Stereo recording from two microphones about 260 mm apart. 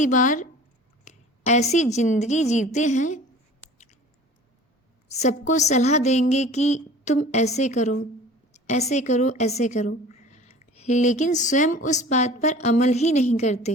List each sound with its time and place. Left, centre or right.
0.0 s a woman's voice: left
5.0 s a woman's voice: left